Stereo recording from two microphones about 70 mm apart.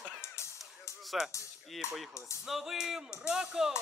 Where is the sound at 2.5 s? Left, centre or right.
Centre.